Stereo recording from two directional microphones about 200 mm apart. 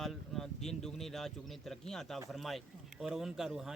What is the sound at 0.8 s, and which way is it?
Speech, centre (ahead or behind).